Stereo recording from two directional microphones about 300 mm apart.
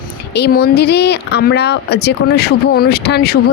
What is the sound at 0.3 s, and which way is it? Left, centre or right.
Speech, left.